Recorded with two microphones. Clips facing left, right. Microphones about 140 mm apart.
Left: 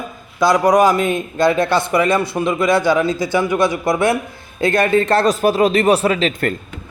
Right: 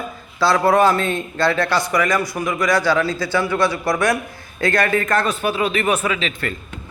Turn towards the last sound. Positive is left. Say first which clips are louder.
# left 6 dB
turn(degrees=45)  # may be behind; listen again after turning